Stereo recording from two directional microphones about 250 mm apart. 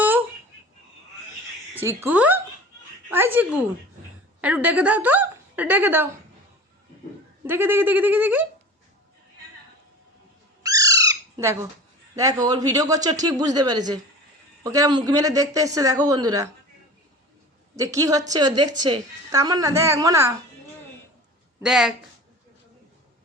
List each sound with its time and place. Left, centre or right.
0.0 s a sound: centre
1.7 s a woman's voice: centre
7.4 s speech: centre
10.6 s bird: centre
12.1 s speech: centre
17.7 s speech: centre
21.6 s speech: centre